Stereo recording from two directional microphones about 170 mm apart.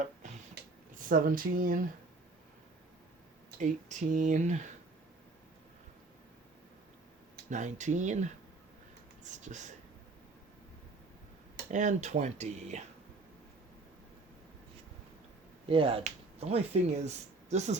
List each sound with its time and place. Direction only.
0.0 s a sound: 45° right (ahead or behind)
0.9 s speech: 55° right (ahead or behind)
3.6 s speech: 45° right (ahead or behind)
7.5 s speech: 45° right (ahead or behind)
11.7 s speech: 45° right (ahead or behind)
15.7 s speech: 30° right (ahead or behind)